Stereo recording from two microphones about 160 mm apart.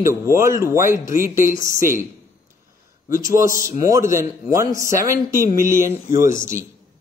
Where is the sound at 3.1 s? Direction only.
20° right (ahead or behind).